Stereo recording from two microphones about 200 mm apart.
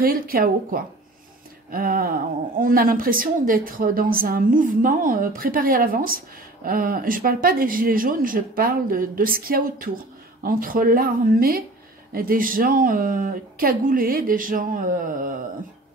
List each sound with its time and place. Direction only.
0.0 s a woman's voice: 45° right (ahead or behind)